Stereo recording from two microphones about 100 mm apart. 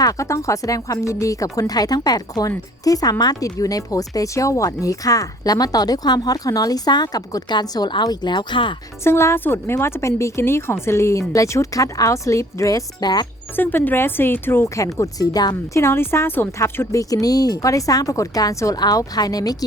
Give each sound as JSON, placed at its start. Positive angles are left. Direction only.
{"t": 0.0, "sound": "speech", "side_deg": 35}
{"t": 9.0, "sound": "speech", "side_deg": 25}
{"t": 13.6, "sound": "speech", "side_deg": 20}
{"t": 15.7, "sound": "speech", "side_deg": 25}